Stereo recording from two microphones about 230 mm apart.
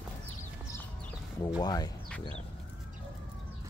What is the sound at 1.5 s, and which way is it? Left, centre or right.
Speech, centre.